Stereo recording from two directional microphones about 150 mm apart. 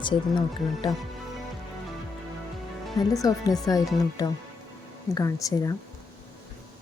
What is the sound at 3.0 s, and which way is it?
A woman's voice, 25° left (ahead or behind).